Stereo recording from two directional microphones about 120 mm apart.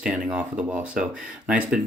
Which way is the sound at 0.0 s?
10° right (ahead or behind).